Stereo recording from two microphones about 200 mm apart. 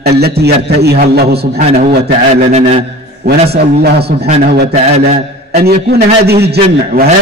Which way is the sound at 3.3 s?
55° right (ahead or behind).